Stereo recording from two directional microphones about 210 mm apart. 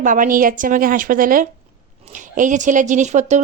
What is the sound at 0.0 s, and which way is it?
A woman's voice, 40° right (ahead or behind).